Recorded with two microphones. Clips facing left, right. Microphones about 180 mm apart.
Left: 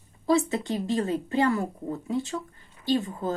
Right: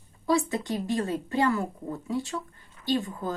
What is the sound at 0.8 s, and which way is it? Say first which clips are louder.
Speech: left 2 dB; 20° left (ahead or behind).